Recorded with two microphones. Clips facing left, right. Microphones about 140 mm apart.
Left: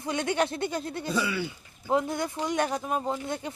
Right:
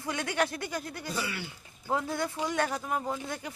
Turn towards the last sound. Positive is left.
turn(degrees=25)  # may be behind; listen again after turning